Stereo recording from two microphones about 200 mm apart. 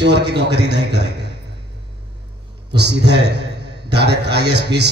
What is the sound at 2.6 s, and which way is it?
A man's voice, 60° right (ahead or behind).